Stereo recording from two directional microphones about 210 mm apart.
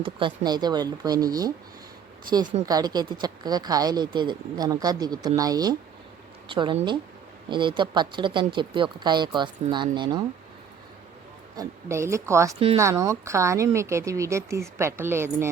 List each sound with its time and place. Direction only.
0.0 s a woman's voice: 25° right (ahead or behind)
11.5 s a woman's voice: 15° right (ahead or behind)